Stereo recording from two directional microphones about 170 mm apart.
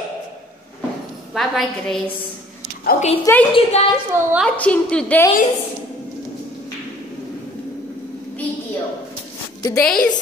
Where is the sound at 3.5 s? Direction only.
35° left (ahead or behind).